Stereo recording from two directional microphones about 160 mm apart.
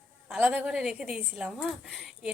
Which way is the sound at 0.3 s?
5° right (ahead or behind).